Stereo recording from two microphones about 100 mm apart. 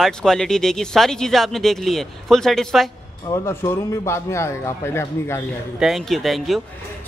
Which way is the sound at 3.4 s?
25° left (ahead or behind).